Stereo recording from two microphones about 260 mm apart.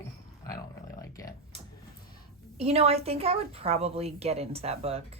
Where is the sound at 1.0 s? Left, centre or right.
Centre.